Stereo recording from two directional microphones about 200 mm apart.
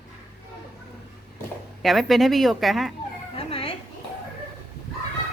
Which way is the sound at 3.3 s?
30° left (ahead or behind).